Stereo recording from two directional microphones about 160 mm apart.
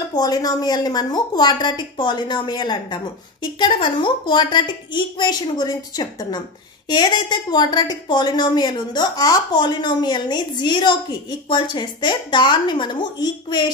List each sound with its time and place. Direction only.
0.1 s a woman's voice: 25° left (ahead or behind)